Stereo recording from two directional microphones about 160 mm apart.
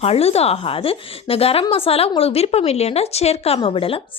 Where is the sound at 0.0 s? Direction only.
40° left (ahead or behind).